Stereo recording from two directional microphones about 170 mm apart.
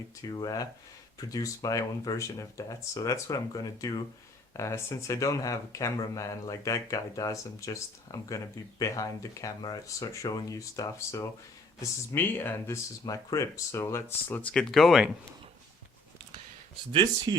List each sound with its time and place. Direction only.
0.2 s speech: 20° left (ahead or behind); by 15.1 s centre (ahead or behind)
17.3 s speech: 25° right (ahead or behind)